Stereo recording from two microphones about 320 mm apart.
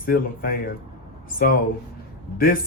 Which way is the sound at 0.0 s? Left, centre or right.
Left.